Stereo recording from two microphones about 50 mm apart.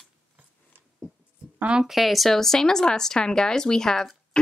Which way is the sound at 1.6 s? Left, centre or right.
Centre.